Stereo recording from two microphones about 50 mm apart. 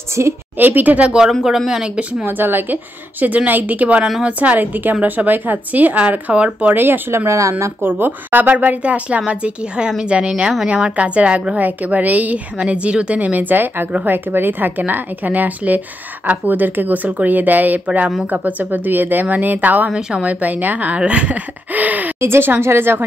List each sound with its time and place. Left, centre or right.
0.2 s a woman's voice: right
0.6 s a woman's voice: right
2.2 s a woman's voice: right
6.7 s speech: right
7.1 s speech: right
7.8 s a woman's voice: right
19.9 s a woman's voice: centre
20.2 s a woman's voice: right
22.2 s speech: right